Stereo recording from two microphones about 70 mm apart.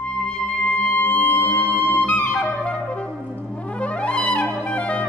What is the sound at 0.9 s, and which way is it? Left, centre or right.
Music, left.